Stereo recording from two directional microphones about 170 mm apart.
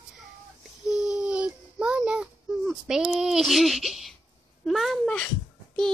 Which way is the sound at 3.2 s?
Centre (ahead or behind).